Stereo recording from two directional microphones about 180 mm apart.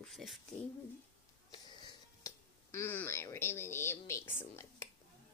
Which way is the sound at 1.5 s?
25° left (ahead or behind).